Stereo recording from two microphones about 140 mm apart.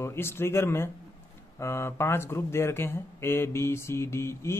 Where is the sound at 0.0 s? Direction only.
15° left (ahead or behind).